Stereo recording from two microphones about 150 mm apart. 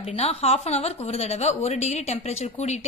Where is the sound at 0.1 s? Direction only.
45° left (ahead or behind).